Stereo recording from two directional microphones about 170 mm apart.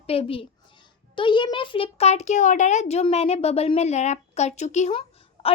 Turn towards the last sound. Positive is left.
turn(degrees=35)  # may be behind; listen again after turning